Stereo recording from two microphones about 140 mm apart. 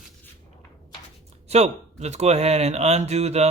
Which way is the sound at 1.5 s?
50° right (ahead or behind).